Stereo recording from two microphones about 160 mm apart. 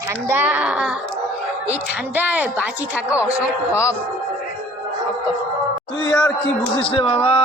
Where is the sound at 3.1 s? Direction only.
20° left (ahead or behind).